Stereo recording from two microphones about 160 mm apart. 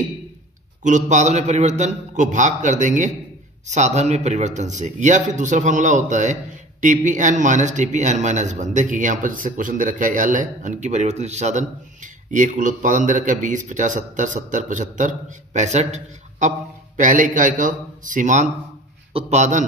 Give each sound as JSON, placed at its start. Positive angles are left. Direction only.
{"t": 0.8, "sound": "a man's voice", "side_deg": -50}